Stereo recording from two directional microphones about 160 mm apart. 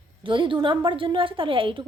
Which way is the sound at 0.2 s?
30° right (ahead or behind).